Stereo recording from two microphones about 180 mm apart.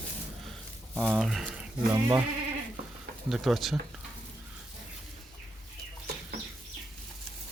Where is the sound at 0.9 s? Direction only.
5° right (ahead or behind).